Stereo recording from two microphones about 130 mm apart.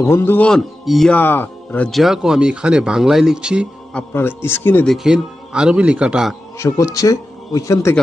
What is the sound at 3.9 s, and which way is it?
Speech, 15° left (ahead or behind).